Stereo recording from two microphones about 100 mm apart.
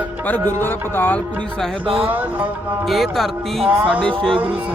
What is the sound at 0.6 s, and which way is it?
Music, 20° left (ahead or behind).